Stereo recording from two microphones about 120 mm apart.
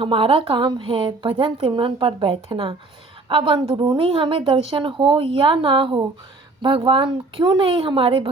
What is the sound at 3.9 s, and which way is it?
A woman's voice, 50° right (ahead or behind).